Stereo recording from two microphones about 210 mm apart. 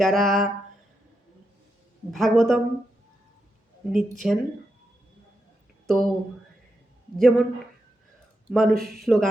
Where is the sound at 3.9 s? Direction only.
Centre (ahead or behind).